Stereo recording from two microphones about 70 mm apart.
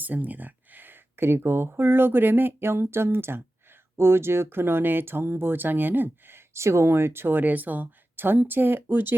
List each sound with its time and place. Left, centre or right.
0.0 s speech: right